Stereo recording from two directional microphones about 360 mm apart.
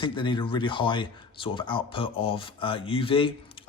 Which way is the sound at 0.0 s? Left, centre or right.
Centre.